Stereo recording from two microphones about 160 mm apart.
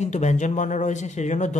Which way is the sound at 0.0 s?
45° left (ahead or behind).